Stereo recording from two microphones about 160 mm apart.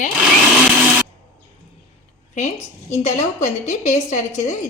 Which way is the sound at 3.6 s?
45° left (ahead or behind).